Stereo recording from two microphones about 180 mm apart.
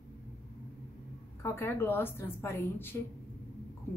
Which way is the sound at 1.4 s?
15° left (ahead or behind).